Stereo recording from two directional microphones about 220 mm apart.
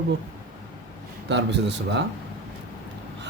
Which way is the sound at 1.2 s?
55° right (ahead or behind).